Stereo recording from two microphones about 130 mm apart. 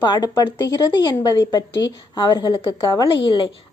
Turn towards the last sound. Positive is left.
turn(degrees=40)  # may be behind; listen again after turning